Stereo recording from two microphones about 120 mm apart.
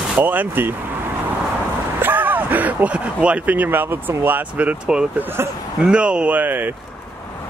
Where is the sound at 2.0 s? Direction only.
15° right (ahead or behind).